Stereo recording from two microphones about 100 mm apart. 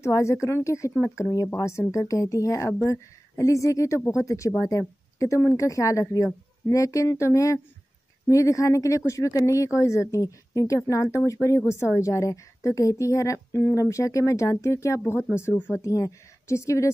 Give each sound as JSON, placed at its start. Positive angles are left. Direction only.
{"t": 0.0, "sound": "a woman's voice", "side_deg": 30}